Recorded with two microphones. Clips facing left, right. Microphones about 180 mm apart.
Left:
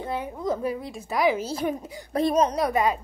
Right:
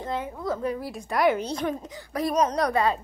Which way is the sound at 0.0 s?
15° left (ahead or behind).